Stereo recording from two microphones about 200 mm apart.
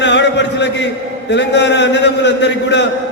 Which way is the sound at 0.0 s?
60° left (ahead or behind).